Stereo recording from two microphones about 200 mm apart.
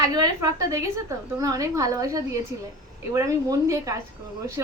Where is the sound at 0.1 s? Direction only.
15° right (ahead or behind).